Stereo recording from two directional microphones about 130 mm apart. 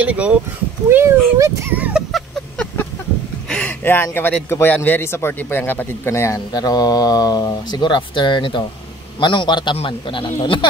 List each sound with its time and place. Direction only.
0.0 s speech: 10° right (ahead or behind)
0.8 s speech: 20° right (ahead or behind)
3.4 s a man's voice: 10° left (ahead or behind); by 10.6 s 40° left (ahead or behind)